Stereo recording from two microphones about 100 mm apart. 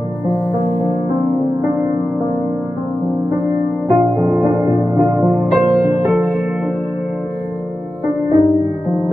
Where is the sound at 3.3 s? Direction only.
20° right (ahead or behind).